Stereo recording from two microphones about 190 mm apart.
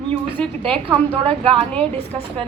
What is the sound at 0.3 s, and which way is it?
A woman's voice, 30° right (ahead or behind).